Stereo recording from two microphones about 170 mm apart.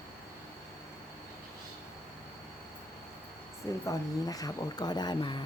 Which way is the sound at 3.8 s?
20° left (ahead or behind).